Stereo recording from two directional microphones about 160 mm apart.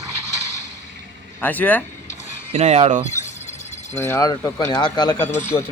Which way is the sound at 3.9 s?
15° left (ahead or behind).